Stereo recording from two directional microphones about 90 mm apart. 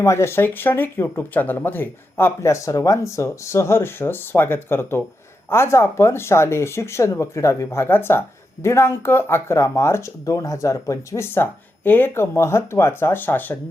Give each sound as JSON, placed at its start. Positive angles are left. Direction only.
{"t": 0.0, "sound": "speech", "side_deg": 30}